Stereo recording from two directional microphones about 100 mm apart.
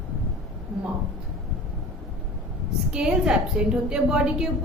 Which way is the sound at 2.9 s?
10° right (ahead or behind).